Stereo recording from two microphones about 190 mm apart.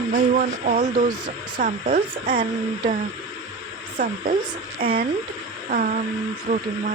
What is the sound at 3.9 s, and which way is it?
Speech, 45° right (ahead or behind).